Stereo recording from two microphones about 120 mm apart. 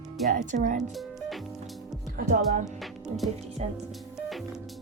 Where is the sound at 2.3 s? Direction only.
90° right.